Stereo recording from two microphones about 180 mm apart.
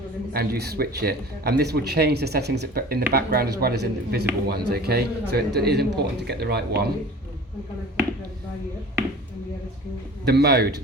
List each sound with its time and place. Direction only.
0.3 s speech: 60° right (ahead or behind)
10.2 s speech: 60° right (ahead or behind)